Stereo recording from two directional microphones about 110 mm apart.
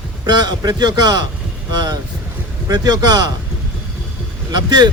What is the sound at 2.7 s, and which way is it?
Speech, 35° right (ahead or behind).